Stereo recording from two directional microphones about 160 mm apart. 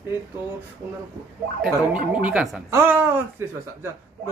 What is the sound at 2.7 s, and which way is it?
Speech, 15° right (ahead or behind).